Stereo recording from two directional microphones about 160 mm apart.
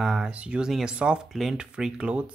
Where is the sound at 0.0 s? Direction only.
5° right (ahead or behind).